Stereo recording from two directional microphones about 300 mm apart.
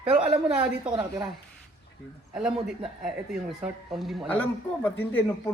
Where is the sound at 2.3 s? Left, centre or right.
Centre.